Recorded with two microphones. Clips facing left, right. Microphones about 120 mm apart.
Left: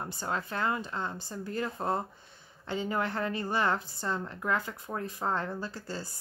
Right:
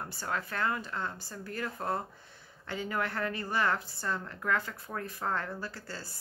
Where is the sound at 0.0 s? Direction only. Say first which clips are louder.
Left 2 dB; 20° left (ahead or behind).